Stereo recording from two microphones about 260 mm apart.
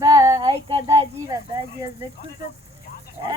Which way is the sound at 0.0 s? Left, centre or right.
Centre.